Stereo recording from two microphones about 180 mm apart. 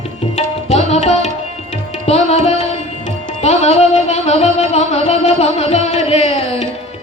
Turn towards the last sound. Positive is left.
turn(degrees=40)  # may be behind; listen again after turning